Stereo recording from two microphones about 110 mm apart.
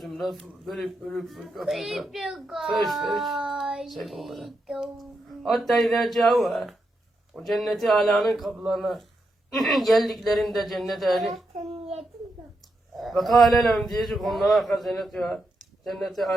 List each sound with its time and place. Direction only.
0.0 s a man's voice: centre (ahead or behind)
11.7 s a sound: 70° right (ahead or behind)
13.0 s a man's voice: centre (ahead or behind)